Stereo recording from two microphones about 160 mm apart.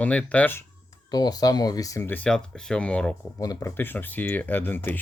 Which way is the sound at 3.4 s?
20° left (ahead or behind).